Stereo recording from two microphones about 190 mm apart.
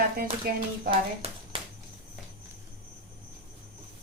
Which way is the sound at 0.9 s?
30° right (ahead or behind).